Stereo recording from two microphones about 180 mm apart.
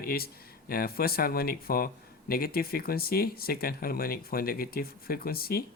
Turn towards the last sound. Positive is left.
turn(degrees=55)  # may be behind; listen again after turning